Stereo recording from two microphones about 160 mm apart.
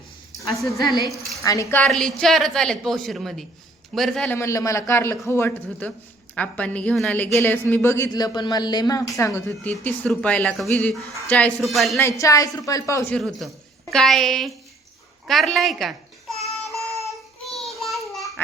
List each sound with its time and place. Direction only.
1.4 s a woman's voice: 20° left (ahead or behind)
1.8 s a woman's voice: 5° left (ahead or behind)
4.4 s a woman's voice: 20° left (ahead or behind)
9.7 s a woman's voice: 5° left (ahead or behind)
11.9 s a woman's voice: 20° left (ahead or behind)
13.1 s a woman's voice: centre (ahead or behind)
15.3 s babbling: centre (ahead or behind)
17.0 s a sound: centre (ahead or behind)
18.4 s babbling: 15° left (ahead or behind)